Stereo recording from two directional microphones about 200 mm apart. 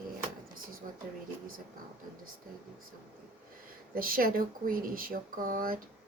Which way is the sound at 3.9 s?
45° right (ahead or behind).